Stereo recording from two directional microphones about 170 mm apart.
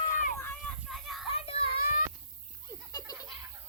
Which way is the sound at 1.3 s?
35° left (ahead or behind).